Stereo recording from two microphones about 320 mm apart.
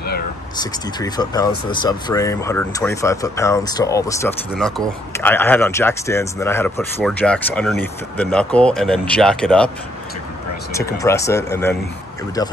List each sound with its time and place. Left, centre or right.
0.6 s speech: centre
10.7 s speech: centre